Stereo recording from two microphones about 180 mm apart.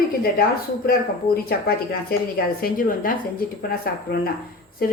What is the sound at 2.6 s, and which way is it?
A woman's voice, 50° left (ahead or behind).